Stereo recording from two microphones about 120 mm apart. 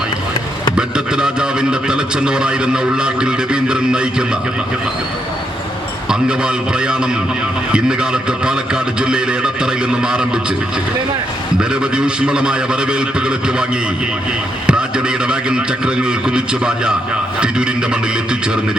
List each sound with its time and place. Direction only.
0.8 s a man's voice: 5° right (ahead or behind)
6.1 s a man's voice: 5° right (ahead or behind)
11.7 s a man's voice: 5° right (ahead or behind)
14.7 s a man's voice: 10° right (ahead or behind)